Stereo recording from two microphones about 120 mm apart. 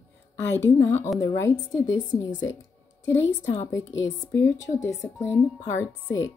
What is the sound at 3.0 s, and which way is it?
A woman's voice, 20° left (ahead or behind).